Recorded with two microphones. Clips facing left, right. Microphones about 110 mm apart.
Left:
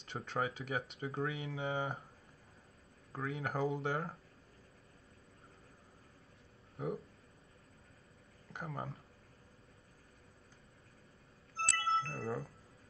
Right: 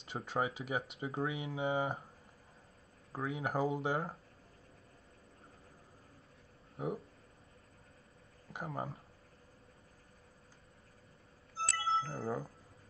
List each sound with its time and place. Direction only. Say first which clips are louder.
0.0 s speech: right 2 dB; 10° right (ahead or behind)
3.3 s speech: right 2 dB; 10° right (ahead or behind)
8.5 s speech: right 2 dB; 15° right (ahead or behind)
11.5 s music: right 1 dB; 5° right (ahead or behind)